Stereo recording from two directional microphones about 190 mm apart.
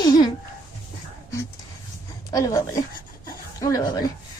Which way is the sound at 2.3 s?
20° left (ahead or behind).